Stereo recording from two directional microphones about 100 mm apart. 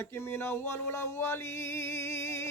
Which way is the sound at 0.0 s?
25° left (ahead or behind).